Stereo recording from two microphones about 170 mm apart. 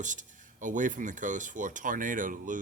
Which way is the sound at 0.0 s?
50° right (ahead or behind).